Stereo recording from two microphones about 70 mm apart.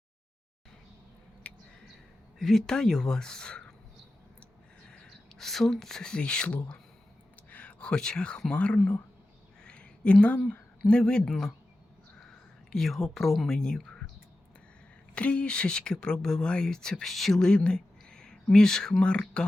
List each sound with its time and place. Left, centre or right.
1.5 s a sound: left
2.4 s speech: centre
4.9 s speech: centre
9.6 s a sound: centre
10.5 s speech: centre
12.7 s speech: centre
15.1 s speech: centre